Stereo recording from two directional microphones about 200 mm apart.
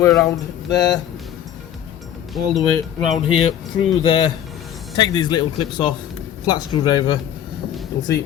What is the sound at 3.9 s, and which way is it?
Speech, 25° left (ahead or behind).